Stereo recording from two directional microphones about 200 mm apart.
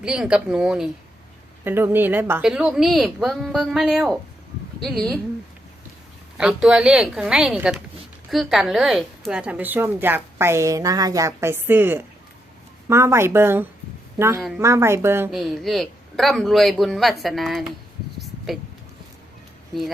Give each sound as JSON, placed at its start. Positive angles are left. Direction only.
{"t": 0.0, "sound": "a woman's voice", "side_deg": -5}
{"t": 6.3, "sound": "a woman's voice", "side_deg": -5}
{"t": 15.3, "sound": "a woman's voice", "side_deg": 0}
{"t": 18.2, "sound": "a sound", "side_deg": 0}